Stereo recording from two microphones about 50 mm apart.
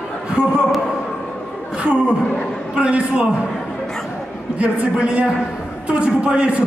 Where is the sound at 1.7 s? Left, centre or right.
Right.